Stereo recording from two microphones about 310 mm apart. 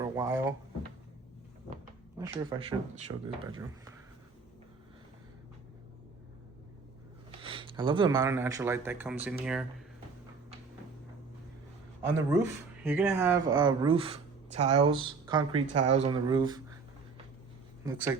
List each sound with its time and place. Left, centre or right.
0.0 s drawer open or close: centre
2.1 s speech: centre
7.3 s speech: centre
12.1 s speech: centre